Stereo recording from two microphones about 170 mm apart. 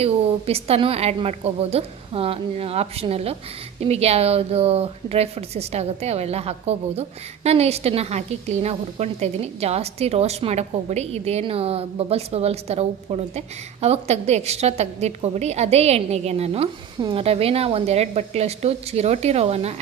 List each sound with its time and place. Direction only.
0.0 s a woman's voice: 35° right (ahead or behind)